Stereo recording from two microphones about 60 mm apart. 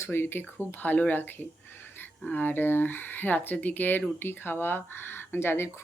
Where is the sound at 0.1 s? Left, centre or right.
Left.